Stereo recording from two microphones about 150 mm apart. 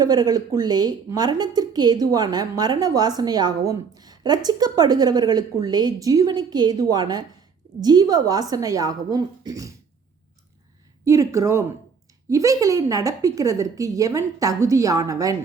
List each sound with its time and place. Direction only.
0.0 s a woman's voice: 25° right (ahead or behind)
11.0 s a woman's voice: 20° right (ahead or behind)